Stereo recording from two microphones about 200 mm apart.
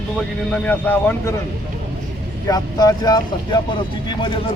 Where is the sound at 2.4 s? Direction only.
20° left (ahead or behind).